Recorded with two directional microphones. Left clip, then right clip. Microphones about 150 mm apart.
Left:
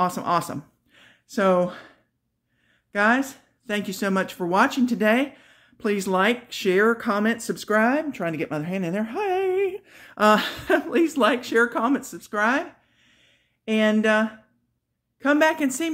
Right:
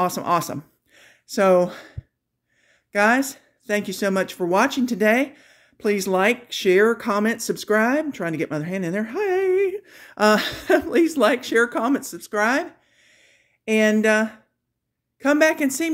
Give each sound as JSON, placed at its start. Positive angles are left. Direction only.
{"t": 0.0, "sound": "speech", "side_deg": -35}